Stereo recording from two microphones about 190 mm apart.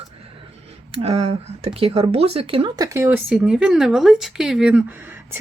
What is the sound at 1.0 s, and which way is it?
Speech, 30° right (ahead or behind).